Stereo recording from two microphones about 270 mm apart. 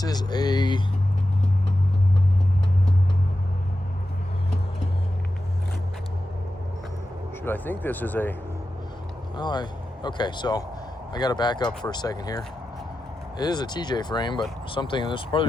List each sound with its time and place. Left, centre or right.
0.0 s speech: centre
7.4 s speech: centre
13.4 s speech: centre